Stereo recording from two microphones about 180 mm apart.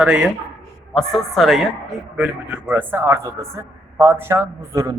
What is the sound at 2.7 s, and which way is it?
A man's voice, 10° right (ahead or behind).